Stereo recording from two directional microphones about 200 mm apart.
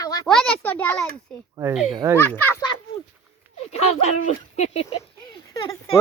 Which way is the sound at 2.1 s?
10° left (ahead or behind).